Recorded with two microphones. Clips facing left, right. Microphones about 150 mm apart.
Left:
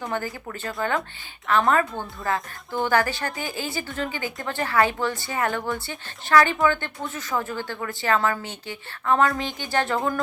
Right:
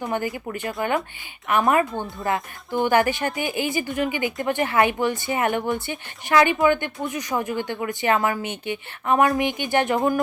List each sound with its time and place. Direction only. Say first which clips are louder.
0.0 s a woman's voice: right 3 dB; 15° right (ahead or behind)